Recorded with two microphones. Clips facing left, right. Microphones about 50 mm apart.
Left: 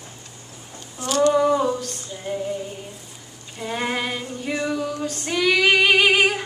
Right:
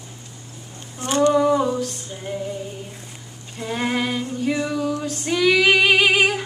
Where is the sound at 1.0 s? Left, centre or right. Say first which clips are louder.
Right 1 dB; right.